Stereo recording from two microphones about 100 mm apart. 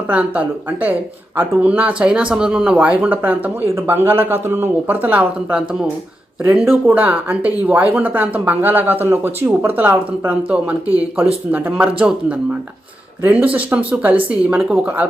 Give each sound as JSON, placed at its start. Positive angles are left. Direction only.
{"t": 0.1, "sound": "speech", "side_deg": -15}
{"t": 6.7, "sound": "speech", "side_deg": -20}